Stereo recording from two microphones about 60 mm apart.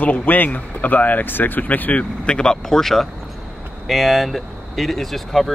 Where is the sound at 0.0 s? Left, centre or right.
Left.